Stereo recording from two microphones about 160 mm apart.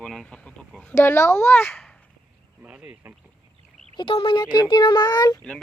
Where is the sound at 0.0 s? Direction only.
5° left (ahead or behind).